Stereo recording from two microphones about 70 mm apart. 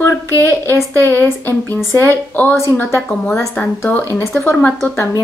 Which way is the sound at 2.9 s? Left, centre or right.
Left.